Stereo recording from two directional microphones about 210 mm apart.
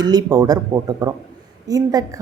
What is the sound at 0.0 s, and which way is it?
A woman's voice, 20° right (ahead or behind).